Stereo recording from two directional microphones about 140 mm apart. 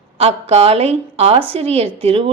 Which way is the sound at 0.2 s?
45° right (ahead or behind).